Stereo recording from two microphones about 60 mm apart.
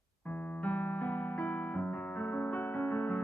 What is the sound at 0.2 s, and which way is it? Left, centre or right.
Keyboard, left.